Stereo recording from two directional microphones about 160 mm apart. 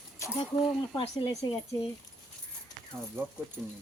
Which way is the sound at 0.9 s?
30° left (ahead or behind).